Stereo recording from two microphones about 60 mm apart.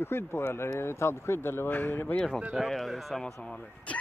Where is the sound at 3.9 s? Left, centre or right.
Left.